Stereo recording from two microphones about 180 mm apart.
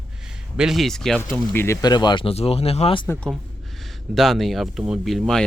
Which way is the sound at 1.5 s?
15° left (ahead or behind).